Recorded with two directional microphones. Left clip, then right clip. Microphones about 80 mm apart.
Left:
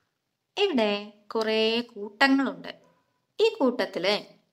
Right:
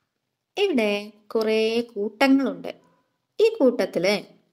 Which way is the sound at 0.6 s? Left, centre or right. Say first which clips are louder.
Right 2 dB; centre.